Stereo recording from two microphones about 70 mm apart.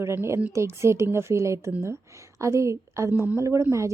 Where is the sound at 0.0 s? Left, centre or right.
Right.